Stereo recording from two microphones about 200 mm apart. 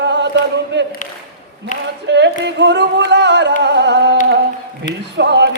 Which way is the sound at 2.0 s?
60° right (ahead or behind).